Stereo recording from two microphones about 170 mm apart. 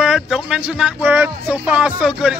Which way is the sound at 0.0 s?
5° right (ahead or behind).